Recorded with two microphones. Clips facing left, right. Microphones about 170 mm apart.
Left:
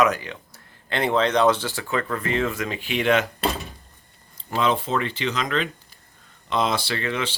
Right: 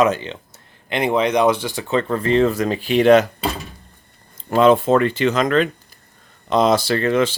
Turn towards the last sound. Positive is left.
turn(degrees=-45)  # may be behind; listen again after turning